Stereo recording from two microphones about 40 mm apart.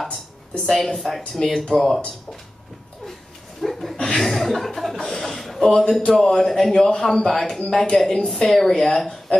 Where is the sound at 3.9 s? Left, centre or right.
Left.